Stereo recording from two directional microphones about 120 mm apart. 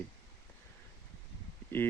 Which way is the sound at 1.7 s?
15° left (ahead or behind).